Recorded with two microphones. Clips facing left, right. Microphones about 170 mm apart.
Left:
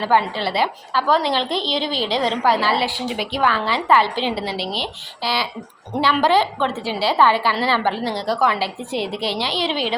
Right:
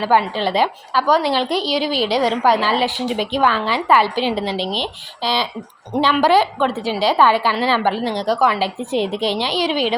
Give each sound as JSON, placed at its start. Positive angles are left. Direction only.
{"t": 0.0, "sound": "a woman's voice", "side_deg": -15}